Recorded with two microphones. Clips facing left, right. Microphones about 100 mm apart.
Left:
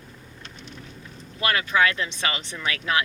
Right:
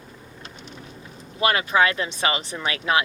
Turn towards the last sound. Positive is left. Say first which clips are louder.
# right 3 dB
turn(degrees=-20)  # may be behind; listen again after turning